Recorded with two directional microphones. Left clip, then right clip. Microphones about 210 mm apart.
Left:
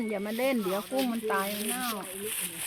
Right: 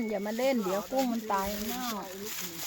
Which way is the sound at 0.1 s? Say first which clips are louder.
Even; 35° left (ahead or behind).